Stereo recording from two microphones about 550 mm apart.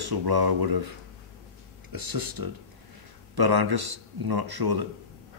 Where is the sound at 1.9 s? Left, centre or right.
Right.